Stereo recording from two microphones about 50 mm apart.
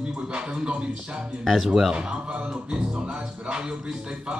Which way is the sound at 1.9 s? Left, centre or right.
Centre.